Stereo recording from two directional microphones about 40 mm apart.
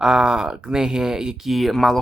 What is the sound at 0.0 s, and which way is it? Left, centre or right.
Speech, centre.